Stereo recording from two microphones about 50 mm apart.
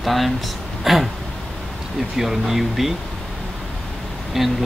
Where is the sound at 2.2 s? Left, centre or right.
Centre.